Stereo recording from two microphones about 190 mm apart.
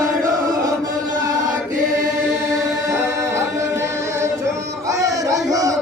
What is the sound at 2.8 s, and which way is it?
Music, 15° right (ahead or behind).